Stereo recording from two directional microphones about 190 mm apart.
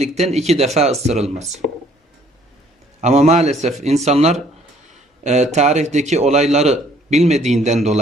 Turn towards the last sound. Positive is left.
turn(degrees=-35)  # may be behind; listen again after turning